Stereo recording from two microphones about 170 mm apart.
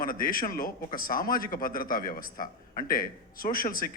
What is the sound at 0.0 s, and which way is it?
A man's voice, 55° left (ahead or behind).